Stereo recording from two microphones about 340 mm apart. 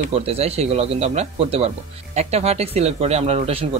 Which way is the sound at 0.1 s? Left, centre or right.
Centre.